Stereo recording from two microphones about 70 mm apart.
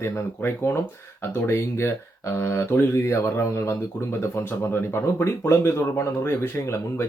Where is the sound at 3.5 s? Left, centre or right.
Left.